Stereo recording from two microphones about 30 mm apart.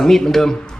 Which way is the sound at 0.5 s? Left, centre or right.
Left.